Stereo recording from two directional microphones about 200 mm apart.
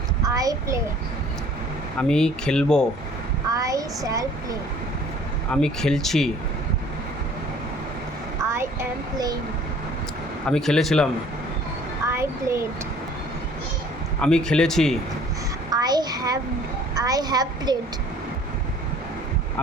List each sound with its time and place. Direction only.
0.3 s a child's voice: 15° right (ahead or behind)
2.0 s speech: 5° left (ahead or behind)
3.5 s child singing: 15° right (ahead or behind)
5.5 s speech: 5° left (ahead or behind)
8.4 s speech: 15° right (ahead or behind)
10.4 s speech: 5° left (ahead or behind)
12.0 s a sound: 15° right (ahead or behind)
14.2 s speech: 5° left (ahead or behind)
15.7 s child singing: 20° right (ahead or behind)
16.9 s a woman's voice: 20° right (ahead or behind)